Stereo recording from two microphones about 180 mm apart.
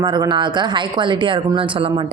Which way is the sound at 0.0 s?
25° right (ahead or behind).